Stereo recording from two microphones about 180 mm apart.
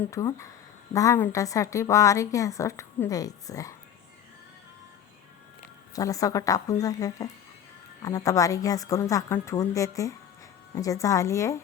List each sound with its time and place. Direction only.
0.0 s a woman's voice: 15° left (ahead or behind)
5.9 s a woman's voice: 20° left (ahead or behind)